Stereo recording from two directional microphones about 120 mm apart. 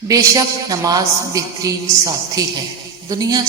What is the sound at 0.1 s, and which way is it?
A woman's voice, 30° right (ahead or behind).